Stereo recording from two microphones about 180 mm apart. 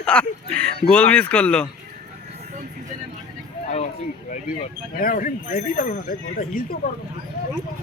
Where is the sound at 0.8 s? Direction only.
5° left (ahead or behind).